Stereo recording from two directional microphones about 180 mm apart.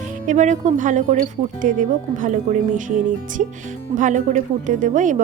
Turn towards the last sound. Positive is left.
turn(degrees=-45)  # may be behind; listen again after turning